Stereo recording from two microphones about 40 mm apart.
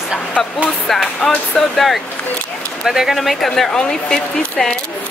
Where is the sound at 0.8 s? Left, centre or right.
Centre.